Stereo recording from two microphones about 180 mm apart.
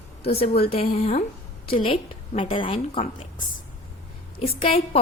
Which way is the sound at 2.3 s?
30° left (ahead or behind).